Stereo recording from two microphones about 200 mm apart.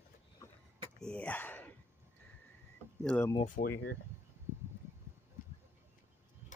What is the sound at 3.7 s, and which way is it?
Speech, 65° left (ahead or behind).